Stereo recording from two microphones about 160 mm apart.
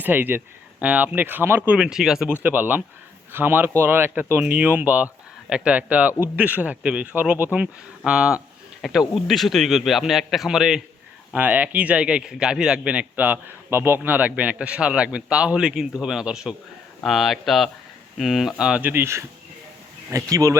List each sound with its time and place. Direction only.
0.0 s a man's voice: 10° right (ahead or behind)
20.3 s speech: 20° right (ahead or behind)